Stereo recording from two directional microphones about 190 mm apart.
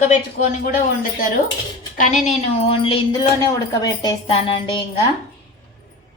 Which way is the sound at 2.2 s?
30° left (ahead or behind).